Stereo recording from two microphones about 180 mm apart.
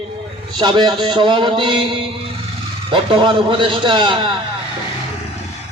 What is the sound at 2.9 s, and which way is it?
A man's voice, 30° right (ahead or behind).